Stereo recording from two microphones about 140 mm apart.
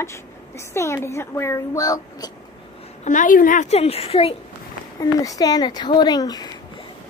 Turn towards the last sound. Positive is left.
turn(degrees=30)  # may be behind; listen again after turning